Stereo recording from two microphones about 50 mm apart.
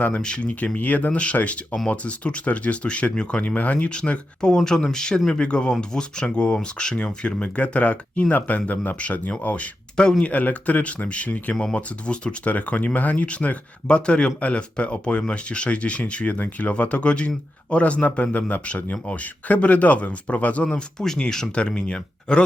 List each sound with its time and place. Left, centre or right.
0.0 s speech: centre
10.0 s speech: centre
10.2 s speech: left
11.6 s speech: left
20.7 s speech: centre